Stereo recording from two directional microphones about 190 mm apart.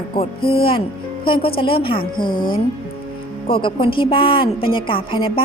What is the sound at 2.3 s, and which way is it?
Speech, 50° left (ahead or behind).